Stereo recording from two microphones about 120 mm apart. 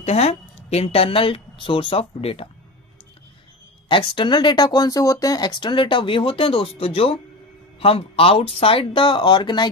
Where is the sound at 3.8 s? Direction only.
40° left (ahead or behind).